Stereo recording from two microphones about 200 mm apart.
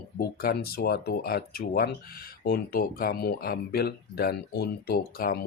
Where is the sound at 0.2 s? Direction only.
50° left (ahead or behind).